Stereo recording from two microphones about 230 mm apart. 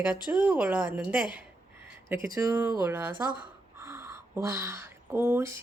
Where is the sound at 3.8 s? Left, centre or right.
Centre.